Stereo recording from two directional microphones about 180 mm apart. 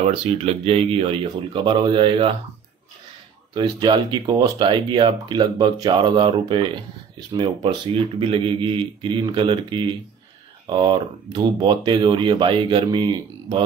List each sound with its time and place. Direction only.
0.0 s speech: 35° right (ahead or behind)
3.5 s speech: 25° right (ahead or behind)